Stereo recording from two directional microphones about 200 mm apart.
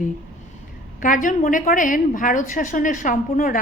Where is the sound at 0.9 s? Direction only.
40° left (ahead or behind).